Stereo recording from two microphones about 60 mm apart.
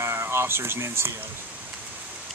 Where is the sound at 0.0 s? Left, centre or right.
Right.